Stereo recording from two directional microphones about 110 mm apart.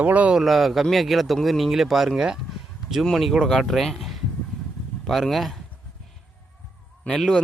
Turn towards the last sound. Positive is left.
turn(degrees=5)  # may be behind; listen again after turning